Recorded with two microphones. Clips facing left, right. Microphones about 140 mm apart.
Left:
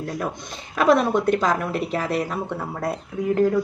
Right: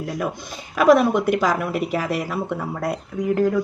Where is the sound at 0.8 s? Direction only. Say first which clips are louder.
Right 3 dB; 5° right (ahead or behind).